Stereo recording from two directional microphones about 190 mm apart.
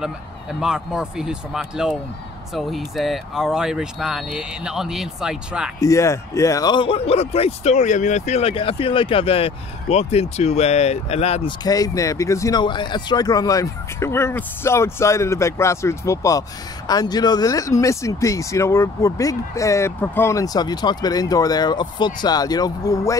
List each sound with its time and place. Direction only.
0.0 s speech: 5° right (ahead or behind)
5.8 s speech: 15° left (ahead or behind); by 11.5 s 35° left (ahead or behind)
11.6 s speech: 20° left (ahead or behind)